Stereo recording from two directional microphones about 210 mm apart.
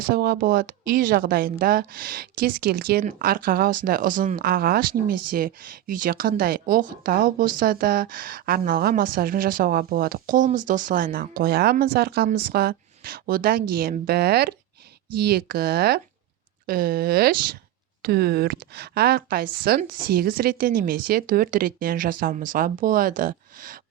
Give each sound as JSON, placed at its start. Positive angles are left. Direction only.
{"t": 0.1, "sound": "a woman's voice", "side_deg": -45}